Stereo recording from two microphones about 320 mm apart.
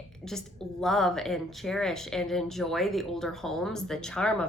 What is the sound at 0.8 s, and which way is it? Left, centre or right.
Speech, centre.